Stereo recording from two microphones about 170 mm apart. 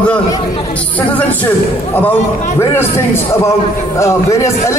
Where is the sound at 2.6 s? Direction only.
15° left (ahead or behind).